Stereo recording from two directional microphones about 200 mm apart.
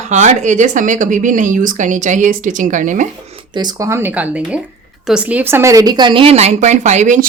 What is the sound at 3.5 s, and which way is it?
A woman's voice, 20° right (ahead or behind).